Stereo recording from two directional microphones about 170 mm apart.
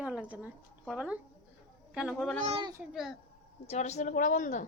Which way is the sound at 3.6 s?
40° left (ahead or behind).